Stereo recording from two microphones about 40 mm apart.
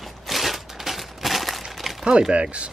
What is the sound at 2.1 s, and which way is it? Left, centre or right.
Speech, right.